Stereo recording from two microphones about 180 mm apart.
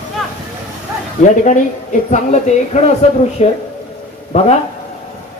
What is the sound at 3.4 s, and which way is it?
Speech, 40° left (ahead or behind).